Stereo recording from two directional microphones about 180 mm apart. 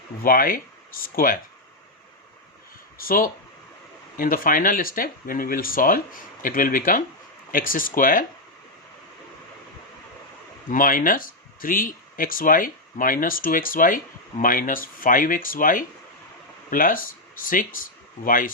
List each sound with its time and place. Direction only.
0.2 s speech: 50° left (ahead or behind)
3.0 s speech: 50° left (ahead or behind)
10.7 s speech: 50° left (ahead or behind)